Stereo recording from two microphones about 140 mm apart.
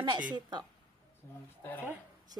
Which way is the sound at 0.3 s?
30° right (ahead or behind).